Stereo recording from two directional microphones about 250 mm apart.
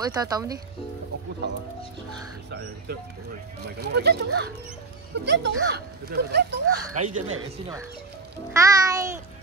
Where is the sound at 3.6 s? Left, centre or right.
Right.